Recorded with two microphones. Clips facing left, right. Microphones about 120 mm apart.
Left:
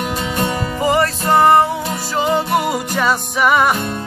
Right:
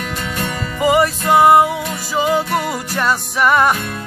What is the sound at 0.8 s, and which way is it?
Music, 10° right (ahead or behind).